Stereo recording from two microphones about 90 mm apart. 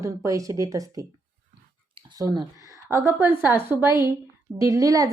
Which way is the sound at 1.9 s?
70° right (ahead or behind).